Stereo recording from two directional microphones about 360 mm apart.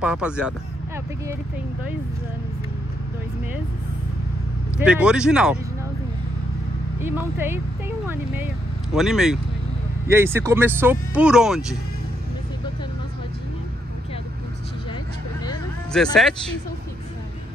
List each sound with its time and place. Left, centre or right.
0.0 s speech: centre
4.7 s speech: centre
7.0 s speech: centre
8.9 s speech: centre
15.4 s vehicle: centre